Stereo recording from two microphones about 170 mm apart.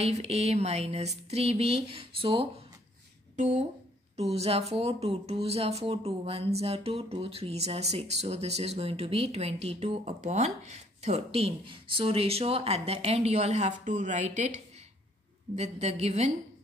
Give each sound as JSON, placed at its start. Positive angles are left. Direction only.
{"t": 0.0, "sound": "speech", "side_deg": -35}
{"t": 4.2, "sound": "speech", "side_deg": -35}